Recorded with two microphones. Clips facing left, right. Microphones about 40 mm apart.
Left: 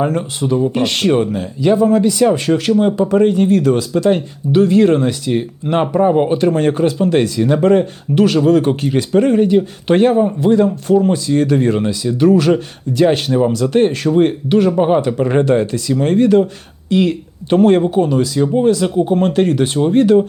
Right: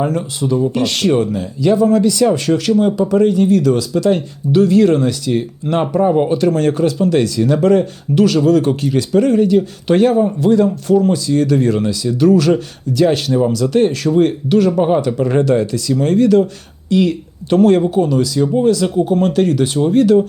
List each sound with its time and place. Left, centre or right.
0.0 s speech: left